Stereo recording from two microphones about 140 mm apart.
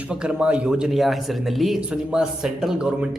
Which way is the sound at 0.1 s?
5° right (ahead or behind).